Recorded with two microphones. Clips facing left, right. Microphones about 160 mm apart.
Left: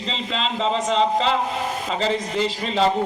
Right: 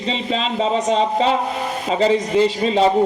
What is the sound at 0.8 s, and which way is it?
Speech, 50° right (ahead or behind).